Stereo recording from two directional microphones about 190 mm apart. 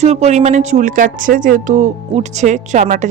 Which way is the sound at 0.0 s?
35° right (ahead or behind).